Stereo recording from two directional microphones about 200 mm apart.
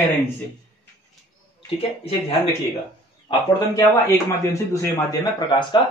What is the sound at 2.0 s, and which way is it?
Speech, 25° left (ahead or behind).